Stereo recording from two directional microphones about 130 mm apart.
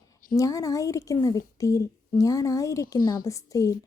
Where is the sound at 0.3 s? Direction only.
25° left (ahead or behind).